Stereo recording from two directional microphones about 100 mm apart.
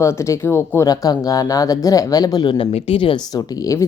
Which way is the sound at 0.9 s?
40° left (ahead or behind).